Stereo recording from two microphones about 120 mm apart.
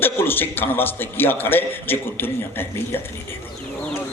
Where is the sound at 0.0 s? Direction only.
15° left (ahead or behind).